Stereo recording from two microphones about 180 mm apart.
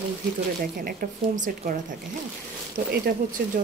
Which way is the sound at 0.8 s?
55° right (ahead or behind).